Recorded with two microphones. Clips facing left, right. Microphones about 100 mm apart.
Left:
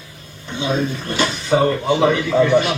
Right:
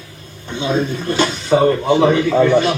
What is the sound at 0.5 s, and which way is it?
A man's voice, 15° right (ahead or behind).